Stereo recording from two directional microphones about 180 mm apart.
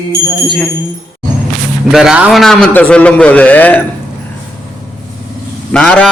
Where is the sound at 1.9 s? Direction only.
5° right (ahead or behind).